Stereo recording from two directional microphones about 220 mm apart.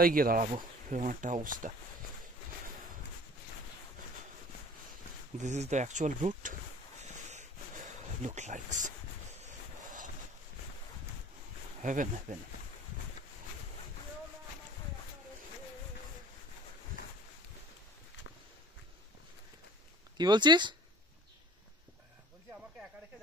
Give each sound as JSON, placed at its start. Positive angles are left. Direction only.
{"t": 0.0, "sound": "speech", "side_deg": -40}
{"t": 5.4, "sound": "speech", "side_deg": -30}
{"t": 7.0, "sound": "a sound", "side_deg": -30}
{"t": 8.2, "sound": "speech", "side_deg": -35}
{"t": 9.4, "sound": "a sound", "side_deg": -35}
{"t": 11.8, "sound": "speech", "side_deg": -35}
{"t": 20.2, "sound": "speech", "side_deg": -20}